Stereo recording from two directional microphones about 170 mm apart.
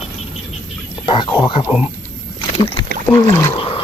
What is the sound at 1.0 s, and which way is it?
Speech, 30° left (ahead or behind).